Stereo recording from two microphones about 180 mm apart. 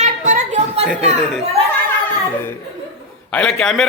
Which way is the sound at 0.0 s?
40° right (ahead or behind).